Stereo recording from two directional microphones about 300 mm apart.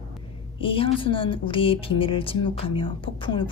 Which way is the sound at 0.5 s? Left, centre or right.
Centre.